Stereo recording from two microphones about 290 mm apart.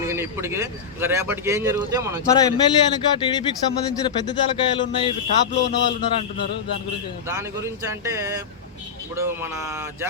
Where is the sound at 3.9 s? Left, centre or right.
Centre.